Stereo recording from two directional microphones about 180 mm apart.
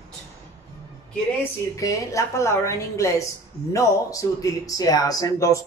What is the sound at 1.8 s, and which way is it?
A woman's voice, 15° left (ahead or behind).